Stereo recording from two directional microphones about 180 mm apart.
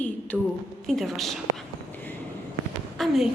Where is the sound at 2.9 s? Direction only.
Centre (ahead or behind).